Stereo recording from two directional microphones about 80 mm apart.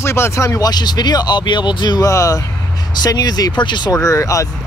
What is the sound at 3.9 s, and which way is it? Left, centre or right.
Speech, left.